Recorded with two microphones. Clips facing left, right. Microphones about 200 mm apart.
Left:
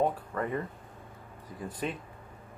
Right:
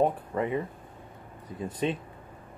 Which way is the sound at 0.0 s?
25° right (ahead or behind).